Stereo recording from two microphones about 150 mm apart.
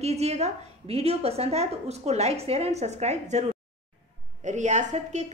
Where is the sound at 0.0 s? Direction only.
45° right (ahead or behind).